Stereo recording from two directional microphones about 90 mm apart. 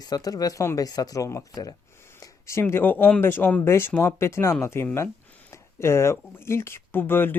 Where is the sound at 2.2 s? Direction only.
35° left (ahead or behind).